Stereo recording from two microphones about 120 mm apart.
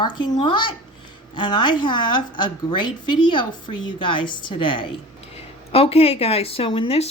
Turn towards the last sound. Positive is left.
turn(degrees=55)  # may be behind; listen again after turning